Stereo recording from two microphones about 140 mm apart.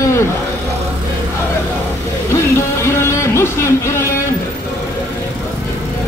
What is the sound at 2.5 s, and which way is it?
Music, 20° left (ahead or behind).